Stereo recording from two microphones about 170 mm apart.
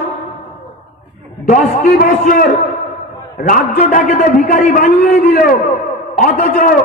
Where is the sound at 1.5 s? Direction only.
55° left (ahead or behind).